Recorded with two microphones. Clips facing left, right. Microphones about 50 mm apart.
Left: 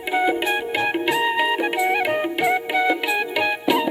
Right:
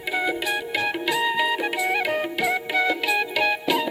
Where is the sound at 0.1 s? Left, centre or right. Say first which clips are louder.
Left 4 dB; left.